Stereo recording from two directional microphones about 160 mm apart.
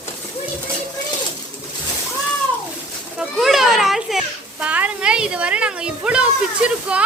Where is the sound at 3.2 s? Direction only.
Centre (ahead or behind).